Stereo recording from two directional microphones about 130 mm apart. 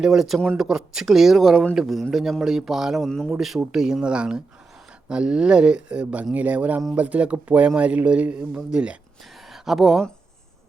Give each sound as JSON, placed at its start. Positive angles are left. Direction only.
{"t": 0.0, "sound": "speech", "side_deg": -5}